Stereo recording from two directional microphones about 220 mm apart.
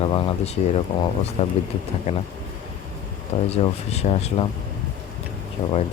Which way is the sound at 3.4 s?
30° left (ahead or behind).